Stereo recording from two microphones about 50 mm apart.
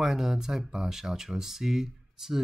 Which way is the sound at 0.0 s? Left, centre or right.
Centre.